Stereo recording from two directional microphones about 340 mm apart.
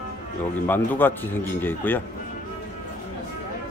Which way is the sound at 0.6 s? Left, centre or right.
Centre.